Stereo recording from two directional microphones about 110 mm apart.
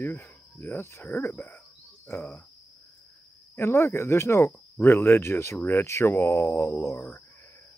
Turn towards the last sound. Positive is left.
turn(degrees=25)  # may be behind; listen again after turning